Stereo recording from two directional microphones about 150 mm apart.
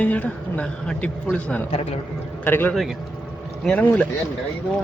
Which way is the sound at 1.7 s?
45° left (ahead or behind).